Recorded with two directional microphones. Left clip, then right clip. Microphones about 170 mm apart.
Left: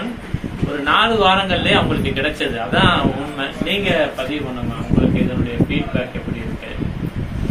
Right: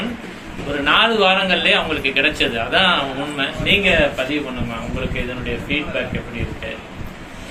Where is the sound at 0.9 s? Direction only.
20° right (ahead or behind).